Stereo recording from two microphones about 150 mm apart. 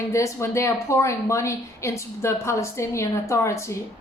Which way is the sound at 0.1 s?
20° left (ahead or behind).